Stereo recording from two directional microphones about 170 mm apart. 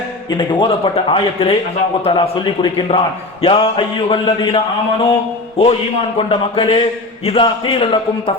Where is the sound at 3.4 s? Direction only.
30° left (ahead or behind).